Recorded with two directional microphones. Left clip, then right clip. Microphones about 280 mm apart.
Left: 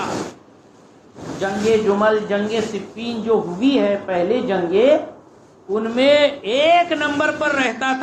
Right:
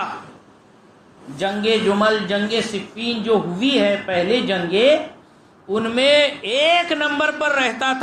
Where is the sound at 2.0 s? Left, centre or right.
Right.